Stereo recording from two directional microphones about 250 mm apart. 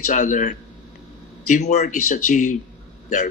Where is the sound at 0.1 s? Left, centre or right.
Left.